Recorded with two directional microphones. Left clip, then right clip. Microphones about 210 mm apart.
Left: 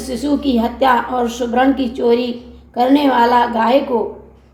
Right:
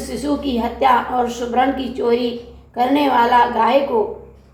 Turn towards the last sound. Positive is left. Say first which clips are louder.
# left 1 dB
turn(degrees=40)  # may be behind; listen again after turning